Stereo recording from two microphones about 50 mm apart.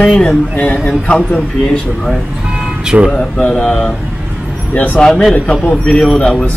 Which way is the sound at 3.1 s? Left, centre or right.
Left.